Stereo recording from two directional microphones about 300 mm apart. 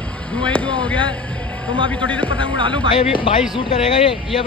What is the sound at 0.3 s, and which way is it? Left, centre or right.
A man's voice, centre.